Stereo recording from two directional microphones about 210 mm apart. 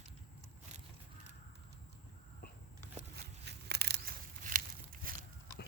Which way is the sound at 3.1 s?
50° right (ahead or behind).